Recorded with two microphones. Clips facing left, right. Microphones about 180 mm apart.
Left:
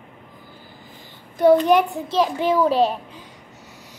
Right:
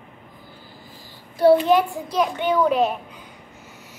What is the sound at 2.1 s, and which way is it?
Speech, 30° left (ahead or behind).